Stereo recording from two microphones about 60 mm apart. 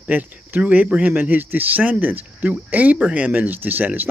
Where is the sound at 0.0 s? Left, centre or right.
Right.